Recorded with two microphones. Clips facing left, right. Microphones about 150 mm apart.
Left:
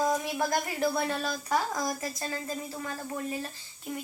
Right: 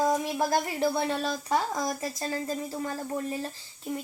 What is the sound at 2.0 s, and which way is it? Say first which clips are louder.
Speech: right 3 dB; 30° right (ahead or behind).